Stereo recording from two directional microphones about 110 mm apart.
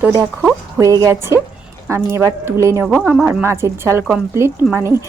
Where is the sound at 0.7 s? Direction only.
30° right (ahead or behind).